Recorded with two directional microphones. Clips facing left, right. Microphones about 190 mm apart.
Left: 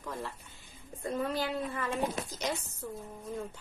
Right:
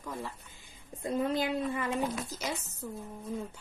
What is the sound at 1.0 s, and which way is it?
Speech, 20° right (ahead or behind).